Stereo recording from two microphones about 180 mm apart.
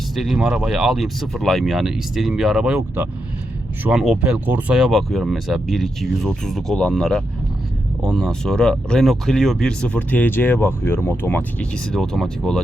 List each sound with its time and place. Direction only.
0.2 s speech: centre (ahead or behind)